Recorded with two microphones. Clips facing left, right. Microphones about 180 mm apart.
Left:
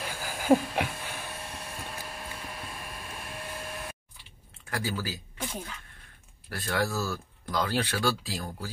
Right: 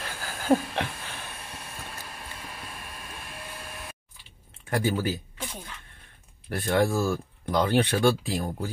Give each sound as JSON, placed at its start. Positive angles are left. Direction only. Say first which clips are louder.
{"t": 0.0, "sound": "chuckle", "louder": "left 1 dB", "side_deg": 10}
{"t": 4.6, "sound": "speech", "louder": "right 7 dB", "side_deg": -25}
{"t": 5.4, "sound": "a sound", "louder": "left 2 dB", "side_deg": 5}
{"t": 6.5, "sound": "speech", "louder": "right 6 dB", "side_deg": -25}